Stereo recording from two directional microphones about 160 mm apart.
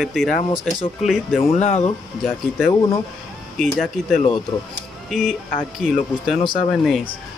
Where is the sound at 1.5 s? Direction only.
45° left (ahead or behind).